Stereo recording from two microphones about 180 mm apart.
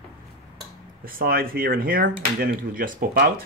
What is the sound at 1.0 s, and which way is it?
Speech, 55° right (ahead or behind).